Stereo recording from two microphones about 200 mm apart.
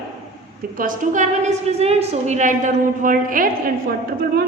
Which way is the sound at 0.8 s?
40° right (ahead or behind).